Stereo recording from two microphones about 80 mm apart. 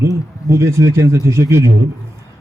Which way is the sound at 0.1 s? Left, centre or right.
Right.